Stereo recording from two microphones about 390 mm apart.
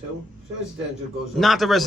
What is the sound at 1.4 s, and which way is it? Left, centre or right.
Speech, centre.